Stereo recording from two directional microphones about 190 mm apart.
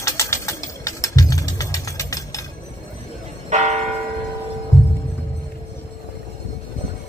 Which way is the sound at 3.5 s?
35° right (ahead or behind).